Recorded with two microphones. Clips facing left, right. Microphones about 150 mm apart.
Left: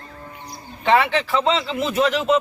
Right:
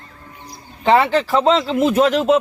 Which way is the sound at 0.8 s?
35° right (ahead or behind).